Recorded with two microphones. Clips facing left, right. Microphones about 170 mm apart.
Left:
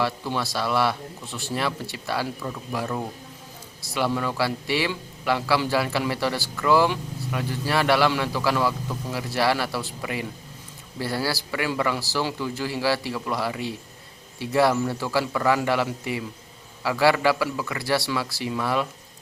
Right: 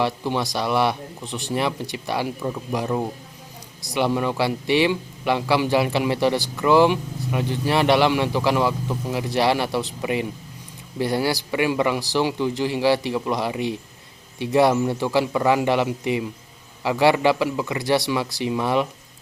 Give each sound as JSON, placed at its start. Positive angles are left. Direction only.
{"t": 0.0, "sound": "speech", "side_deg": -20}